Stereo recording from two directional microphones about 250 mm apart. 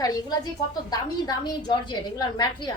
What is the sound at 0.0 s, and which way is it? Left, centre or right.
A woman's voice, centre.